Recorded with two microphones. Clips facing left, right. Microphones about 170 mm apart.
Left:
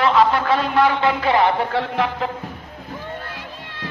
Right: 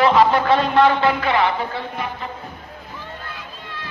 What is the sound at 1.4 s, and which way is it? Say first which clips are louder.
Speech: left 3 dB; 70° left (ahead or behind).